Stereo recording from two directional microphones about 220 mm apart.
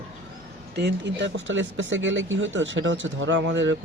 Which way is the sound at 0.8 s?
50° right (ahead or behind).